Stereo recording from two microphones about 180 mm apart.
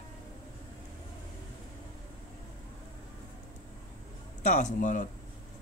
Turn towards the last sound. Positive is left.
turn(degrees=45)  # may be behind; listen again after turning